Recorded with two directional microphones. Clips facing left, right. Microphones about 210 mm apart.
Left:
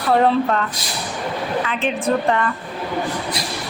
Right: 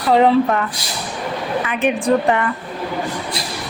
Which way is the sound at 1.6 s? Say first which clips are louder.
Right 6 dB; 15° right (ahead or behind).